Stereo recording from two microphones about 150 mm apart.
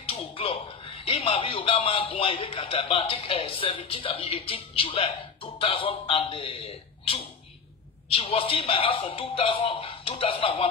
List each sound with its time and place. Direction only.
0.1 s a man's voice: 40° left (ahead or behind)